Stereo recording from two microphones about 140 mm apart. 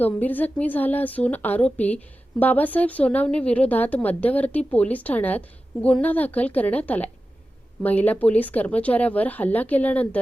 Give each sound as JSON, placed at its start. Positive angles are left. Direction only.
{"t": 0.0, "sound": "a woman's voice", "side_deg": 10}